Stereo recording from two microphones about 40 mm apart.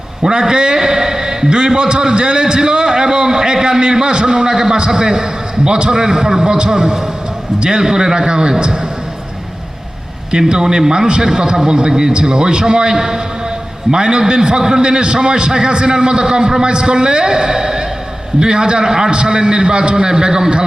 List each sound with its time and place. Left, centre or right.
0.2 s a man's voice: centre
10.5 s a man's voice: centre